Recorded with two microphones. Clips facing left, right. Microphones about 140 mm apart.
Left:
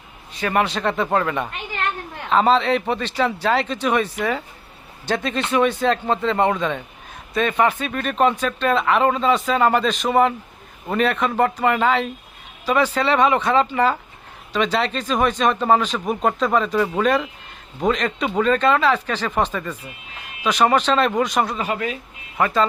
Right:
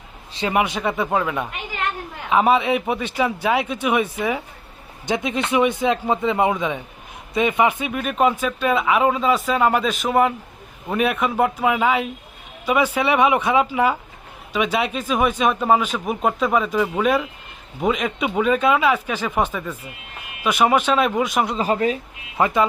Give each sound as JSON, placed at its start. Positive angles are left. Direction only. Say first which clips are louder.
{"t": 0.5, "sound": "speech", "louder": "left 1 dB", "side_deg": -10}
{"t": 21.5, "sound": "speech", "louder": "right 4 dB", "side_deg": -30}
{"t": 22.4, "sound": "speech", "louder": "right 1 dB", "side_deg": -20}